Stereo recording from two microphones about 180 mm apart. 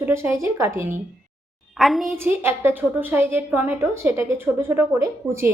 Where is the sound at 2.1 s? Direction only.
15° right (ahead or behind).